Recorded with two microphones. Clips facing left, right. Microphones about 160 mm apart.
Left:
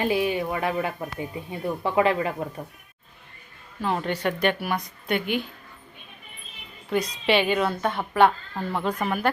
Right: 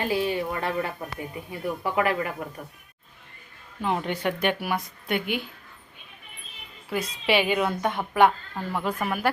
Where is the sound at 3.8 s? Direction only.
15° right (ahead or behind).